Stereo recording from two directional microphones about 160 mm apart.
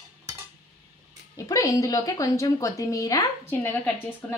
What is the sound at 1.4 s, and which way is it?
A woman's voice, 20° left (ahead or behind).